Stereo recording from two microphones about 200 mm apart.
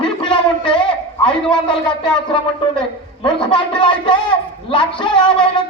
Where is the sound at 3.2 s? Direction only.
25° left (ahead or behind).